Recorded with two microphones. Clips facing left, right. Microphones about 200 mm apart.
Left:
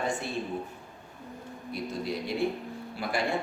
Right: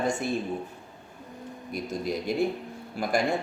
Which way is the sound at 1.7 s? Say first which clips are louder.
Right 2 dB; 45° right (ahead or behind).